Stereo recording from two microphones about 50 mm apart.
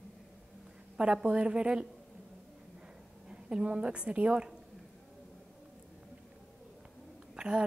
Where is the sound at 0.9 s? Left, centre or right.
Centre.